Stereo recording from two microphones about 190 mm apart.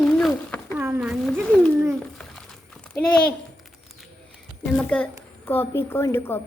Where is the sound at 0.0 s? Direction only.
5° left (ahead or behind).